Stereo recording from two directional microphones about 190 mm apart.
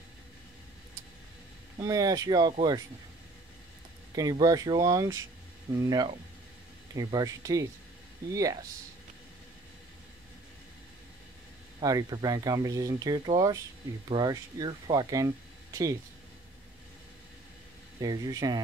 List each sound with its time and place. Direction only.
1.8 s speech: 20° right (ahead or behind)
4.1 s speech: 20° right (ahead or behind)
11.8 s speech: 20° right (ahead or behind)
18.0 s speech: 20° right (ahead or behind)